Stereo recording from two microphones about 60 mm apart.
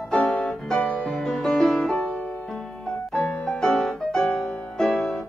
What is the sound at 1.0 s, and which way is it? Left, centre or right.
Music, centre.